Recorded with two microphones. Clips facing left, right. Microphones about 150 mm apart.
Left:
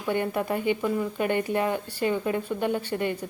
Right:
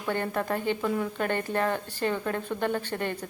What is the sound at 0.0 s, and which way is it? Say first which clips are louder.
Dishes: left 3 dB; 10° left (ahead or behind).